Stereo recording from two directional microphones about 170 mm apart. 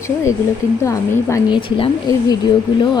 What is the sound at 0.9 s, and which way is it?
A woman's voice, 15° left (ahead or behind).